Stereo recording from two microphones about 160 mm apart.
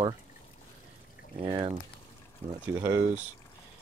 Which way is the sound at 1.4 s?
30° right (ahead or behind).